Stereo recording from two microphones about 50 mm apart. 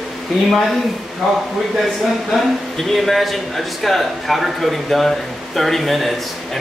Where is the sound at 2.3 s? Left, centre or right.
Centre.